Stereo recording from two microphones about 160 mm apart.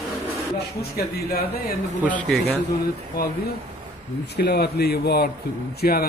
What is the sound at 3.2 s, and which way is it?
Speech, 65° left (ahead or behind).